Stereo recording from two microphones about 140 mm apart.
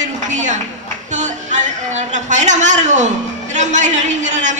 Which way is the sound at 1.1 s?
60° right (ahead or behind).